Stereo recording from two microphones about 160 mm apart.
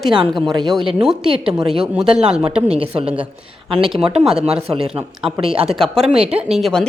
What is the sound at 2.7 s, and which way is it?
Speech, 35° right (ahead or behind).